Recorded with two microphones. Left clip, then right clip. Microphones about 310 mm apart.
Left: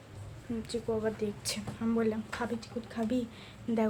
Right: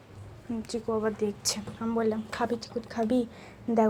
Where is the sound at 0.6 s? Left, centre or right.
Centre.